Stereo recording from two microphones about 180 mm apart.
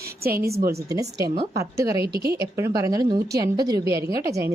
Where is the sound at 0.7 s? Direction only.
20° right (ahead or behind).